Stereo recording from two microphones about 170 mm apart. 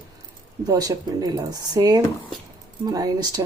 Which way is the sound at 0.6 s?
20° right (ahead or behind).